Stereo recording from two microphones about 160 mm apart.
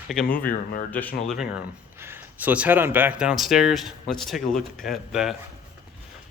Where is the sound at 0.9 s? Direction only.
10° left (ahead or behind).